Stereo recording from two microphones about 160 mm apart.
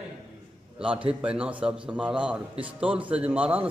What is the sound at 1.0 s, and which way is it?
A man's voice, 5° right (ahead or behind).